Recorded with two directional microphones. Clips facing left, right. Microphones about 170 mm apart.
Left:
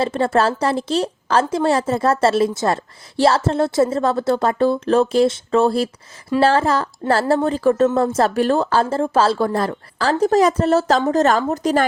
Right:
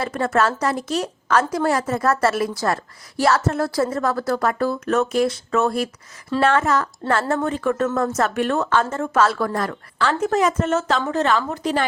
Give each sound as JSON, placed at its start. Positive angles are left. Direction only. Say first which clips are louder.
{"t": 0.0, "sound": "a woman's voice", "louder": "left 3 dB", "side_deg": 30}